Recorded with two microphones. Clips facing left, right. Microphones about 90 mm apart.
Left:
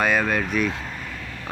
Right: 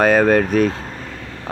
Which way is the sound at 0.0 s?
40° right (ahead or behind).